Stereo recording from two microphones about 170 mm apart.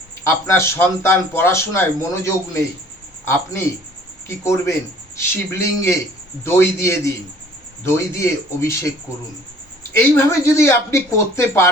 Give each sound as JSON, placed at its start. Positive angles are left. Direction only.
{"t": 0.3, "sound": "speech", "side_deg": 15}
{"t": 4.3, "sound": "speech", "side_deg": 15}
{"t": 10.0, "sound": "speech", "side_deg": 15}